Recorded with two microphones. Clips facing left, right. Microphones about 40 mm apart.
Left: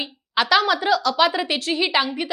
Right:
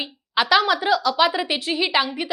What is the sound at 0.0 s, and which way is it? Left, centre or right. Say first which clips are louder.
A woman's voice: even; centre.